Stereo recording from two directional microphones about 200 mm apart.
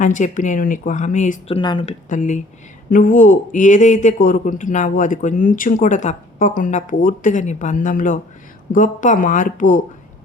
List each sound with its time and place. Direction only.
0.0 s a man's voice: 40° left (ahead or behind)